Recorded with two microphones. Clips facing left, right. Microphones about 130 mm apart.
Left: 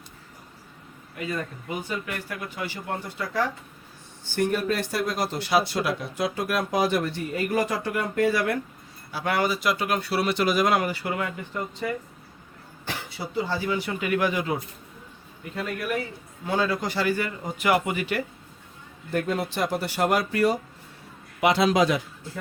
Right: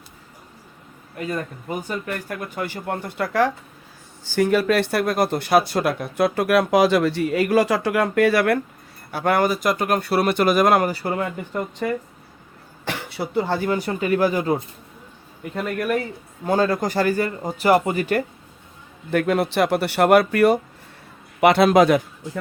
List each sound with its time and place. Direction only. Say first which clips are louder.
1.2 s speech: right 3 dB; 40° right (ahead or behind); by 3.5 s 70° right (ahead or behind)
4.3 s speech: right 6 dB; 90° right; by 8.5 s 70° right (ahead or behind)
9.1 s speech: right 6 dB; 50° right (ahead or behind)
12.8 s speech: right 6 dB; 75° right (ahead or behind); by 14.6 s 40° right (ahead or behind)
15.5 s a man's voice: right 6 dB; 55° right (ahead or behind)
16.4 s speech: right 6 dB; 45° right (ahead or behind)
19.1 s a man's voice: right 7 dB; 80° right; by 22.0 s 55° right (ahead or behind)